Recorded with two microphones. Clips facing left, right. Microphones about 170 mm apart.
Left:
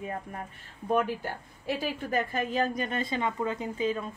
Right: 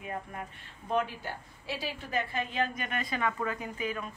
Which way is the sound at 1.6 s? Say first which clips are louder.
Left 6 dB; 50° left (ahead or behind).